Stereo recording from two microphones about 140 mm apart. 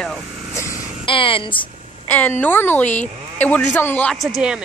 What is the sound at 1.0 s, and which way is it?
Speech, 40° left (ahead or behind).